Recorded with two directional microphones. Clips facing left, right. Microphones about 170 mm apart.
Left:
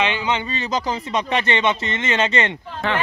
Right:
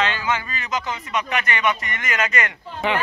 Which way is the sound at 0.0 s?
20° left (ahead or behind).